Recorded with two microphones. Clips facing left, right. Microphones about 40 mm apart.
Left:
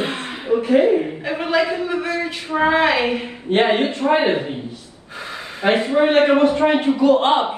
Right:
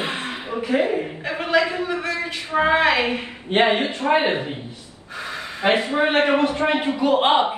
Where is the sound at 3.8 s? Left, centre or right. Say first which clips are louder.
Left 3 dB; right.